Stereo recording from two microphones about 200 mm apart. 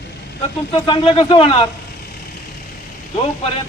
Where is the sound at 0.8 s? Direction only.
25° left (ahead or behind).